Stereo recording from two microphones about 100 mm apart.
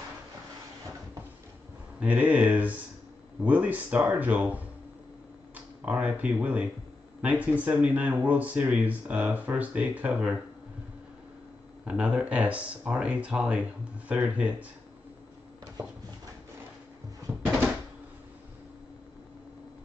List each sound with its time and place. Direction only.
2.0 s speech: 15° right (ahead or behind)
11.8 s speech: 15° right (ahead or behind)